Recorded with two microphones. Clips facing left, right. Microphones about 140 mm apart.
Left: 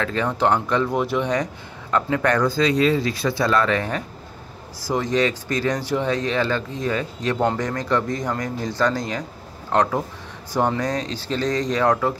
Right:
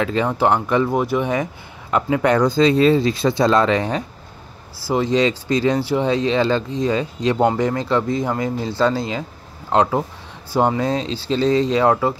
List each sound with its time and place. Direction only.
0.0 s speech: 15° right (ahead or behind)